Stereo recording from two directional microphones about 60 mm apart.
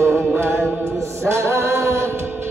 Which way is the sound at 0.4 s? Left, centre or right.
Right.